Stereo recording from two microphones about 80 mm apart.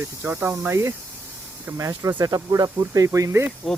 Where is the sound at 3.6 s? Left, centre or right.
Centre.